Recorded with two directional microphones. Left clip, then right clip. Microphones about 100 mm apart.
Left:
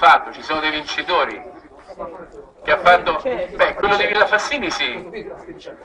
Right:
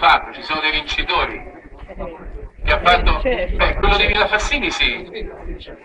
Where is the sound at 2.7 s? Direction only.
25° left (ahead or behind).